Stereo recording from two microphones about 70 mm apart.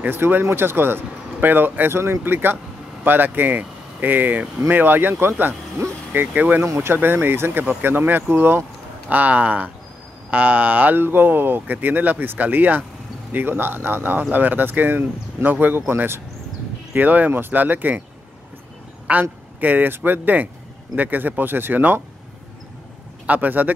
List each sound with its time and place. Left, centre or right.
0.0 s speech: right
6.6 s speech: right
9.1 s speech: right
19.1 s speech: right
23.2 s speech: right